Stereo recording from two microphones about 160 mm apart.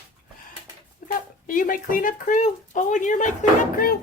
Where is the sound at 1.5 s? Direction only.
60° left (ahead or behind).